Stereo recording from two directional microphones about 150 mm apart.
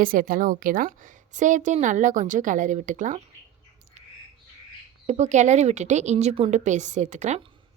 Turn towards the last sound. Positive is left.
turn(degrees=-50)  # may be behind; listen again after turning